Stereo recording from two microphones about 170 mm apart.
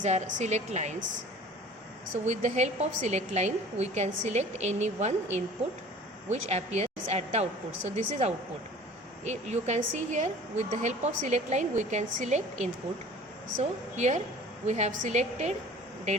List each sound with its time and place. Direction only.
0.0 s a woman's voice: 45° right (ahead or behind)
2.2 s a woman's voice: 45° right (ahead or behind)